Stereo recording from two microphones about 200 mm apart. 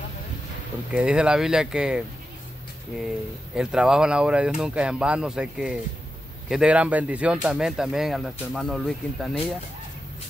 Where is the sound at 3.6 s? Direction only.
5° right (ahead or behind).